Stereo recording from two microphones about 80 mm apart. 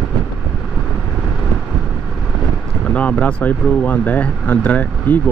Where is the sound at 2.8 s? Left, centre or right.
Centre.